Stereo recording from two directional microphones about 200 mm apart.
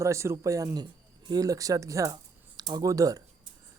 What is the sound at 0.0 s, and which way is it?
Speech, 15° right (ahead or behind).